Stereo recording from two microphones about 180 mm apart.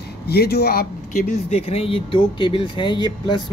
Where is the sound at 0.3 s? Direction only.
60° left (ahead or behind).